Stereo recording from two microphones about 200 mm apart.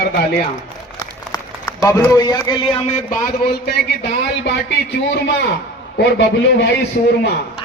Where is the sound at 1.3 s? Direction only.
15° left (ahead or behind); by 3.5 s 45° left (ahead or behind).